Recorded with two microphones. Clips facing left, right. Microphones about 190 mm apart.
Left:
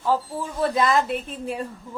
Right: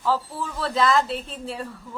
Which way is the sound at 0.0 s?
15° left (ahead or behind).